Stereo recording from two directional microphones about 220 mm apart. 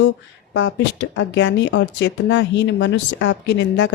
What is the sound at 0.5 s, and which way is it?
Speech, 55° left (ahead or behind).